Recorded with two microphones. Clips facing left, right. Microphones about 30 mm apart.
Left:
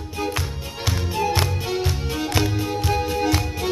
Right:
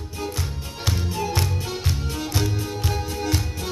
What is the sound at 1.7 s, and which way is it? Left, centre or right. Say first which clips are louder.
Music: left 4 dB; centre.